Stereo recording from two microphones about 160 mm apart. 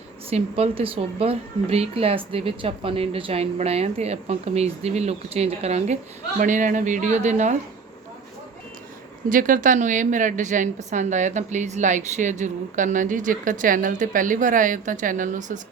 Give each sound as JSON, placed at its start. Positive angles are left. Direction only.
{"t": 0.3, "sound": "speech", "side_deg": -40}
{"t": 6.4, "sound": "a woman's voice", "side_deg": -55}
{"t": 9.3, "sound": "a woman's voice", "side_deg": -60}